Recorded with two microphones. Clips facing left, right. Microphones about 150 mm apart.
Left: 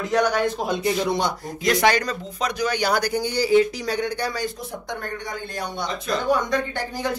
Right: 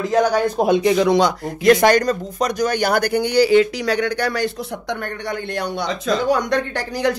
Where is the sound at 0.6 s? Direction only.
75° right (ahead or behind).